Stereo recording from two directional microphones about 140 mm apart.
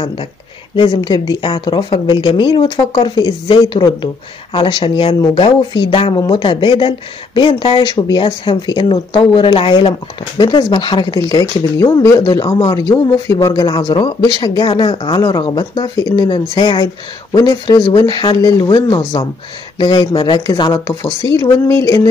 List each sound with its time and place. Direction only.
0.7 s speech: 30° left (ahead or behind)